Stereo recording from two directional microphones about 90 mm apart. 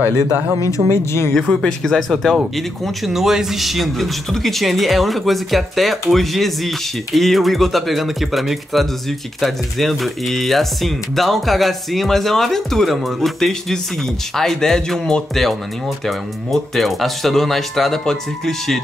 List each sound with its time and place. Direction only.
0.0 s speech: 20° right (ahead or behind)
0.8 s speech: 40° right (ahead or behind)
1.3 s speech: 5° left (ahead or behind)